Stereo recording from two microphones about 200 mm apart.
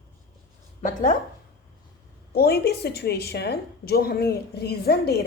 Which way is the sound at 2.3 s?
50° left (ahead or behind).